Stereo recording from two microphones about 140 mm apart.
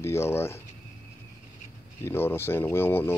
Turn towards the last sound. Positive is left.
turn(degrees=15)  # may be behind; listen again after turning